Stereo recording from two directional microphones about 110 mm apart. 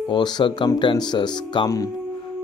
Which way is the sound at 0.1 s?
45° left (ahead or behind).